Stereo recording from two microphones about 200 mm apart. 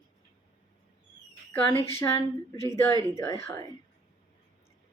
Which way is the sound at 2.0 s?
15° left (ahead or behind).